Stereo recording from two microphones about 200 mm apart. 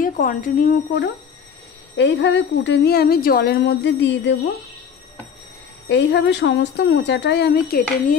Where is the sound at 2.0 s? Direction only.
60° left (ahead or behind).